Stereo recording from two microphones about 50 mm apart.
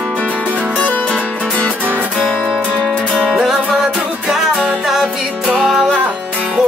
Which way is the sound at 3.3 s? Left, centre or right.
Centre.